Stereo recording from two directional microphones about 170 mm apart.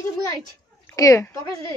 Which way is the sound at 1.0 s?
15° left (ahead or behind).